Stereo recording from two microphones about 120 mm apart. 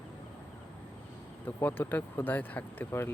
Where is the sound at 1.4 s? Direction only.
15° left (ahead or behind).